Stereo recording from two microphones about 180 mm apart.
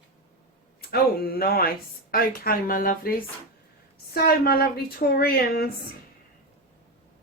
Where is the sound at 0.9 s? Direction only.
55° left (ahead or behind).